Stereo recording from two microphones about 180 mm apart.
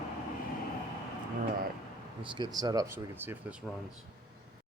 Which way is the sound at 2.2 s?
25° right (ahead or behind).